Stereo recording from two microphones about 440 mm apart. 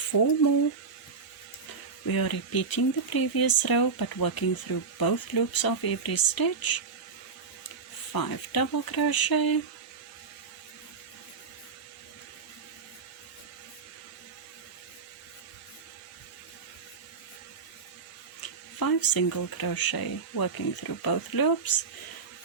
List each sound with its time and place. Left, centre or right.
0.1 s speech: left
2.0 s speech: left
8.1 s speech: left
18.8 s speech: left